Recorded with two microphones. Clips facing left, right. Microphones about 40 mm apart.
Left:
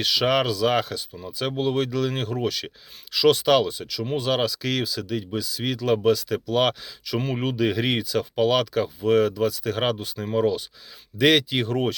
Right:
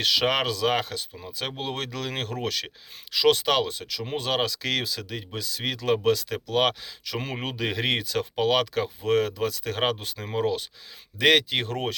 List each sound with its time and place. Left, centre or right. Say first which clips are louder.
0.0 s speech: left 2 dB; right
3.2 s speech: left 3 dB; right
3.7 s speech: left 4 dB; right
7.0 s speech: left 5 dB; right
11.2 s speech: left 1 dB; centre
11.5 s speech: left 4 dB; right